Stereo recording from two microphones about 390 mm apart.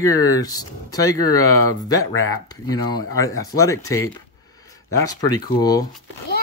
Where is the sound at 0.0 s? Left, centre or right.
Centre.